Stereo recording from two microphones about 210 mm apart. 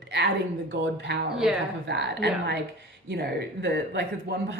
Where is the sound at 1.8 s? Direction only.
55° right (ahead or behind).